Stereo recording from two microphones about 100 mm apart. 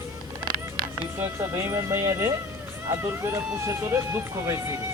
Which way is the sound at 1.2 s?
30° right (ahead or behind).